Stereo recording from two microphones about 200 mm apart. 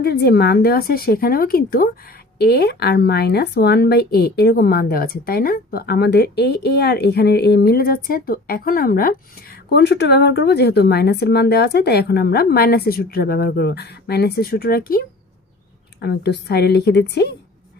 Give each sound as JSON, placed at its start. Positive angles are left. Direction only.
{"t": 0.0, "sound": "a woman's voice", "side_deg": 55}